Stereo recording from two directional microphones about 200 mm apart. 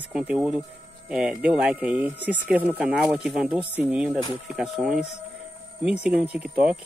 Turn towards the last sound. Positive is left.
turn(degrees=-5)  # may be behind; listen again after turning